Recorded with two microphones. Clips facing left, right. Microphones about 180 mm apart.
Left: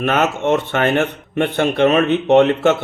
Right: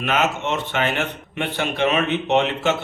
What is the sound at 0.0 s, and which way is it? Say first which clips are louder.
A man's voice: left 5 dB; 50° left (ahead or behind).